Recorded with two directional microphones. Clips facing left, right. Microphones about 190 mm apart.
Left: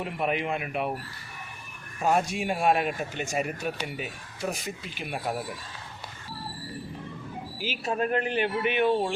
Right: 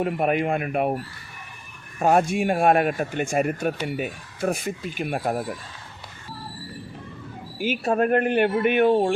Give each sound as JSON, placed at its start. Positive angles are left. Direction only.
{"t": 0.0, "sound": "speech", "side_deg": -50}
{"t": 2.0, "sound": "speech", "side_deg": -55}
{"t": 7.6, "sound": "speech", "side_deg": -55}